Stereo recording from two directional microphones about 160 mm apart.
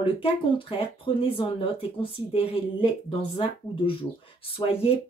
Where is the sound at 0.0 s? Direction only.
35° left (ahead or behind).